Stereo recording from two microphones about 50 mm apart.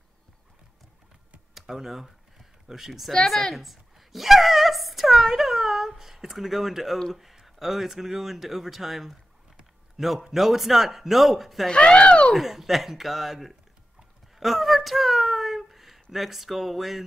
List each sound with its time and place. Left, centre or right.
1.5 s a sound: centre
3.1 s speech: centre
3.5 s a sound: centre
7.0 s speech: centre
11.6 s speech: centre
12.4 s speech: centre